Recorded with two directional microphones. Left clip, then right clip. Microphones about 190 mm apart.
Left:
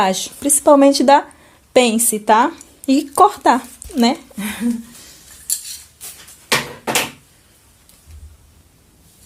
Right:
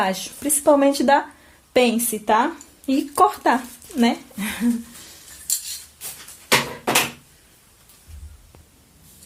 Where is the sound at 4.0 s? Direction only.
45° left (ahead or behind).